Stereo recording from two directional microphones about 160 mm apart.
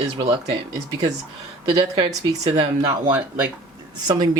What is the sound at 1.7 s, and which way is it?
Speech, 30° right (ahead or behind).